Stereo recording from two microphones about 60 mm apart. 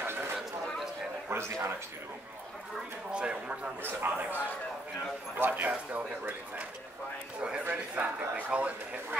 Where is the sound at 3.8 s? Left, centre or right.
Right.